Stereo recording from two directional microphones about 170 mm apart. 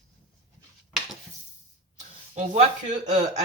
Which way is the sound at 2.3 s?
45° right (ahead or behind).